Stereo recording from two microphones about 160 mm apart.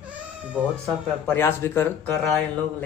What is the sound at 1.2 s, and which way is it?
Speech, 15° left (ahead or behind).